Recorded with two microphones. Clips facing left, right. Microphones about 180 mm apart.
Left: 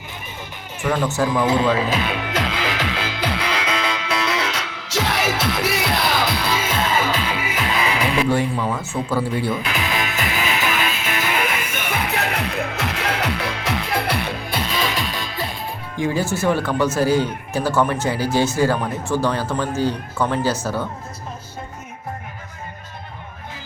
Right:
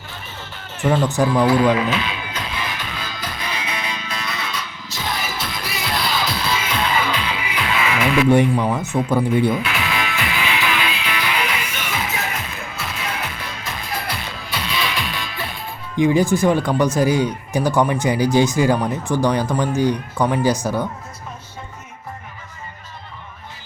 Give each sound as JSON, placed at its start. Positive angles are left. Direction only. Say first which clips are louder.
{"t": 1.0, "sound": "speech", "louder": "right 2 dB", "side_deg": -15}
{"t": 1.7, "sound": "speech", "louder": "right 1 dB", "side_deg": 30}
{"t": 2.0, "sound": "speech", "louder": "left 2 dB", "side_deg": 50}
{"t": 2.2, "sound": "music", "louder": "left 5 dB", "side_deg": 90}
{"t": 6.2, "sound": "music", "louder": "left 1 dB", "side_deg": 45}
{"t": 8.3, "sound": "speech", "louder": "right 5 dB", "side_deg": -20}
{"t": 9.6, "sound": "music", "louder": "even", "side_deg": 40}
{"t": 16.0, "sound": "speech", "louder": "right 6 dB", "side_deg": -15}